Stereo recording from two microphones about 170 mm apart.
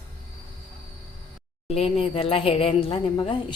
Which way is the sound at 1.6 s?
35° left (ahead or behind).